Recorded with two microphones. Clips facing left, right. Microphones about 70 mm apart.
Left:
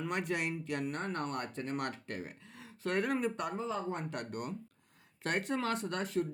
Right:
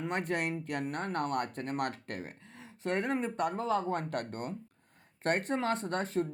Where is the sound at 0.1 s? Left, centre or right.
Right.